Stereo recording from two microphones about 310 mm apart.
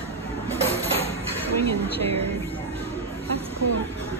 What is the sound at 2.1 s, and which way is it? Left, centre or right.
Speech, centre.